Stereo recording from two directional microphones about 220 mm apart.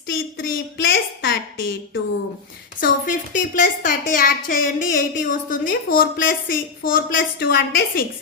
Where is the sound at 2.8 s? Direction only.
35° left (ahead or behind).